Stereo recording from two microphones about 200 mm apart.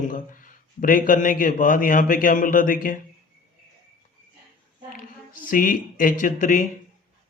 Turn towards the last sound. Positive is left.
turn(degrees=40)  # may be behind; listen again after turning